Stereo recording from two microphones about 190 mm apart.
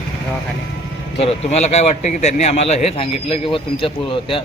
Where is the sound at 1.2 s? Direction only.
35° left (ahead or behind).